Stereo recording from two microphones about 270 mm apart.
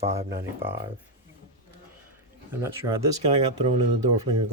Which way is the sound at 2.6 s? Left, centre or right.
Centre.